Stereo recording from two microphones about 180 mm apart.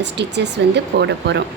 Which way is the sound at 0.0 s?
75° right (ahead or behind).